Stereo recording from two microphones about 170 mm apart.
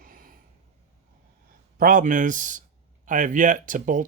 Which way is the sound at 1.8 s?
55° right (ahead or behind).